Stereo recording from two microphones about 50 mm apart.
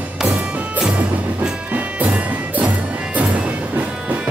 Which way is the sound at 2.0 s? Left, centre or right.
Right.